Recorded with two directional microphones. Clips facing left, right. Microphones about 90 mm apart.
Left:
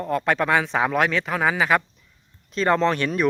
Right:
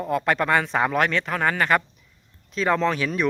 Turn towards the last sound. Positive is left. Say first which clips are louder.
# left 2 dB
turn(degrees=0)  # may be behind; listen again after turning